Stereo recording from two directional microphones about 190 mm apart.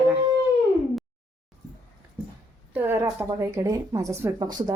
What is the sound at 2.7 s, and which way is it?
Speech, 10° right (ahead or behind).